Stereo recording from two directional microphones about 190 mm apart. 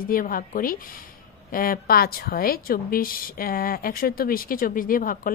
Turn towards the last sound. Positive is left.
turn(degrees=45)  # may be behind; listen again after turning